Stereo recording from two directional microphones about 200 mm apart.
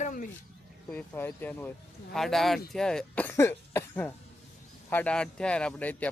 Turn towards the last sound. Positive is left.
turn(degrees=5)  # may be behind; listen again after turning